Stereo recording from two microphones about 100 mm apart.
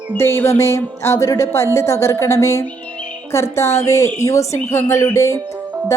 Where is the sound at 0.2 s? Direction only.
25° left (ahead or behind).